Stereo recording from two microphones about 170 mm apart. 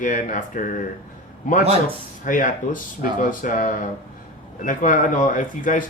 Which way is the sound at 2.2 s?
50° left (ahead or behind).